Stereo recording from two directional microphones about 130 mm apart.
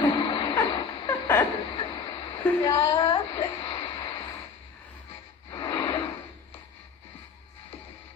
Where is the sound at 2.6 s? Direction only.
35° left (ahead or behind).